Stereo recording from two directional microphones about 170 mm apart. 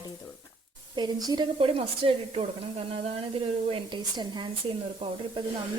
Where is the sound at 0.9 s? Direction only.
25° right (ahead or behind).